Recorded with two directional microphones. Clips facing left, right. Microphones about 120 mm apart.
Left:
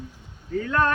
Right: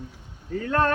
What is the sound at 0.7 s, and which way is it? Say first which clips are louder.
Speech: right 1 dB; 40° right (ahead or behind).